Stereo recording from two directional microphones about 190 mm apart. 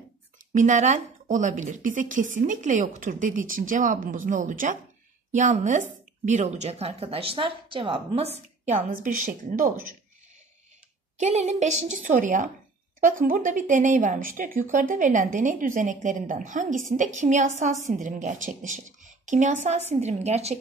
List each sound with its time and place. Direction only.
0.5 s a woman's voice: 40° right (ahead or behind)
8.9 s a woman's voice: 45° right (ahead or behind)
11.1 s a woman's voice: 35° right (ahead or behind)